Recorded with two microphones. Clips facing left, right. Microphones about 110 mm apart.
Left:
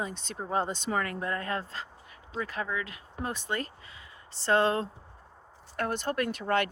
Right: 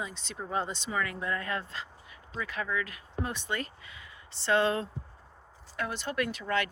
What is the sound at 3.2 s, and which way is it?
Speech, 40° left (ahead or behind).